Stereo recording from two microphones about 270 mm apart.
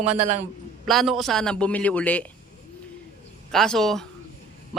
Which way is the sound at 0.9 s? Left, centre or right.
Centre.